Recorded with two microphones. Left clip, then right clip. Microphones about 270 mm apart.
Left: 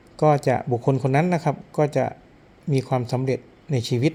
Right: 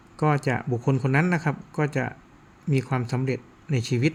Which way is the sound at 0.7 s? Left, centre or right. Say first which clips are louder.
Left 4 dB; right.